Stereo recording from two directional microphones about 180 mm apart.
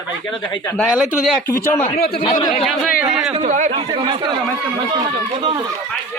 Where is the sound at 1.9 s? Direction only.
60° left (ahead or behind).